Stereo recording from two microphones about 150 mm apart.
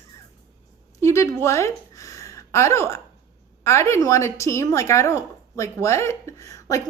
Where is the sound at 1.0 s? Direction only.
20° left (ahead or behind).